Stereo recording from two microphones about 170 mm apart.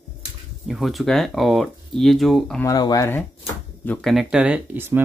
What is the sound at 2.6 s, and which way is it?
Speech, 20° left (ahead or behind).